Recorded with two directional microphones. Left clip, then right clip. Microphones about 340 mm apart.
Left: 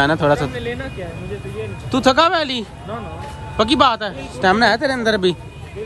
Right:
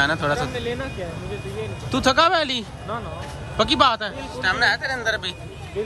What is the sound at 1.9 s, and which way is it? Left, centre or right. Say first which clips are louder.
A man's voice: left 3 dB; centre.